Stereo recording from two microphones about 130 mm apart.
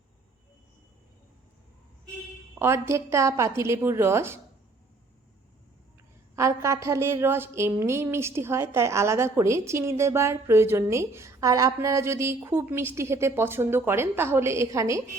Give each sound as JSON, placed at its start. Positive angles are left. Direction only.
{"t": 2.6, "sound": "a woman's voice", "side_deg": -20}
{"t": 6.3, "sound": "a woman's voice", "side_deg": -25}